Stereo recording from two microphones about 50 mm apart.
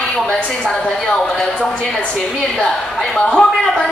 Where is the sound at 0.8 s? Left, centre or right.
Left.